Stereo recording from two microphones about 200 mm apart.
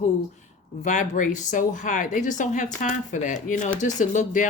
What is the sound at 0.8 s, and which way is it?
Speech, 40° left (ahead or behind).